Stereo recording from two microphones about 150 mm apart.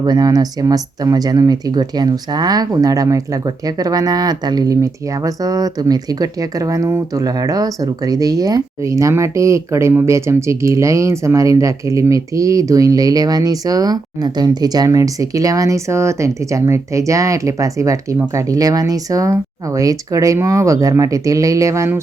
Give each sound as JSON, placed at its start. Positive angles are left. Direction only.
{"t": 0.0, "sound": "speech", "side_deg": -25}